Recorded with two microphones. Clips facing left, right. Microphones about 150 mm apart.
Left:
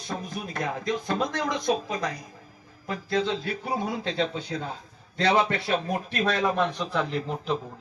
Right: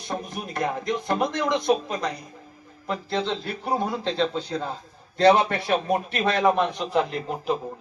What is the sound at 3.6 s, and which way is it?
A man's voice, 65° right (ahead or behind).